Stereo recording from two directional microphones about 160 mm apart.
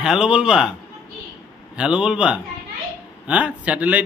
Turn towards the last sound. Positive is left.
turn(degrees=-10)  # may be behind; listen again after turning